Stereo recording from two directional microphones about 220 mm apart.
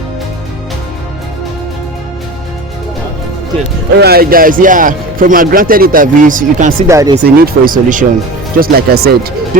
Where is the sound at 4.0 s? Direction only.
45° right (ahead or behind).